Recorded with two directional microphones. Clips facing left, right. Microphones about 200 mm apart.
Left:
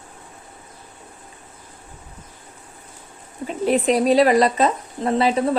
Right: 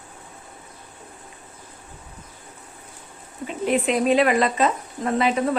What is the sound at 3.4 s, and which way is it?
Speech, 35° left (ahead or behind).